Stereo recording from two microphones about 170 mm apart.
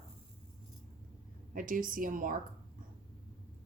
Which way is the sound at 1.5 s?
55° right (ahead or behind).